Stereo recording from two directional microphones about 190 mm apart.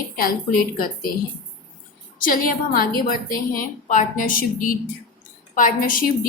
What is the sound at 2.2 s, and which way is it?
A woman's voice, 50° left (ahead or behind).